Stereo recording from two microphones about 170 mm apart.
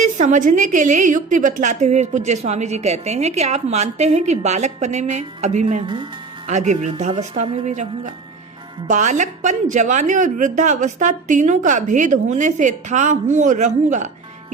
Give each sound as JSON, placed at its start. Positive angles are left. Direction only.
{"t": 0.0, "sound": "a woman's voice", "side_deg": -45}
{"t": 5.8, "sound": "speech", "side_deg": -30}
{"t": 6.5, "sound": "a woman's voice", "side_deg": -45}
{"t": 7.4, "sound": "a woman's voice", "side_deg": -30}
{"t": 7.7, "sound": "a woman's voice", "side_deg": -45}